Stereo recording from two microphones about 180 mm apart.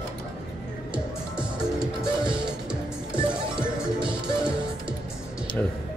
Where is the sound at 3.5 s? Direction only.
5° right (ahead or behind).